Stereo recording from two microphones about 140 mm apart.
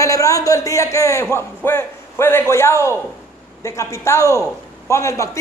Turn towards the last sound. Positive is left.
turn(degrees=20)  # may be behind; listen again after turning